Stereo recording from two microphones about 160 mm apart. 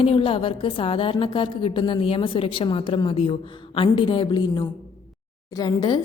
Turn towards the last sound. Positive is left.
turn(degrees=25)  # may be behind; listen again after turning